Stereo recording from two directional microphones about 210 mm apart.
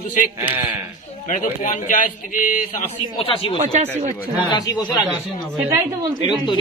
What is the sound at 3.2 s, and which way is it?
Speech, 25° left (ahead or behind).